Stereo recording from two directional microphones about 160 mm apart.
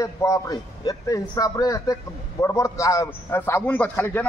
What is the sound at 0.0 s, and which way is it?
A man's voice, 20° left (ahead or behind).